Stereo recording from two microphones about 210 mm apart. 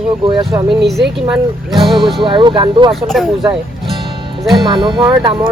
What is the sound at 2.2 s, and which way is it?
Speech, 20° right (ahead or behind).